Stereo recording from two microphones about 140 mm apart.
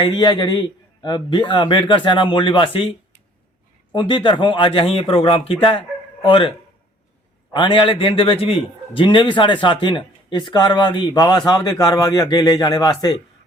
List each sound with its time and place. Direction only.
0.0 s speech: 30° left (ahead or behind)
3.9 s speech: 35° left (ahead or behind)
7.5 s speech: 35° left (ahead or behind)